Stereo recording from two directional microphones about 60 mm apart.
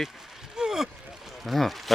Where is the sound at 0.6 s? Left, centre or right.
Centre.